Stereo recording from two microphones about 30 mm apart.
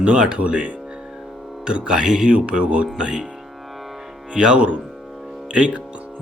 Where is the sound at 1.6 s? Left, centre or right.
Right.